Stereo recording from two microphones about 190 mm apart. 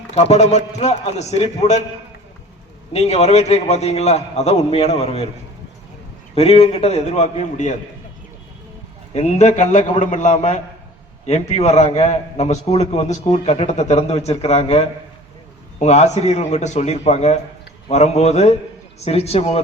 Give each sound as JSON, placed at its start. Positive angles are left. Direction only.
{"t": 0.1, "sound": "a man's voice", "side_deg": 35}
{"t": 2.9, "sound": "a man's voice", "side_deg": 35}
{"t": 6.3, "sound": "a man's voice", "side_deg": 30}
{"t": 9.1, "sound": "a man's voice", "side_deg": 35}